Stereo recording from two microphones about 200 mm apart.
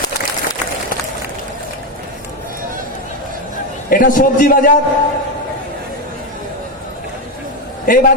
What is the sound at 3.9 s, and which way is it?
Speech, 45° left (ahead or behind).